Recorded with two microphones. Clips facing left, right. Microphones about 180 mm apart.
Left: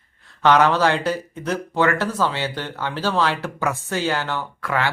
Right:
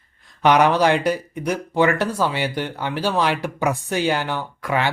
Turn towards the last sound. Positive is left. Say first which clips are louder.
# right 1 dB
turn(degrees=-20)  # may be behind; listen again after turning